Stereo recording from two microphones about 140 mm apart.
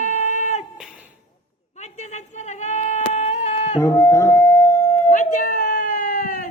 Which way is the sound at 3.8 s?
20° left (ahead or behind).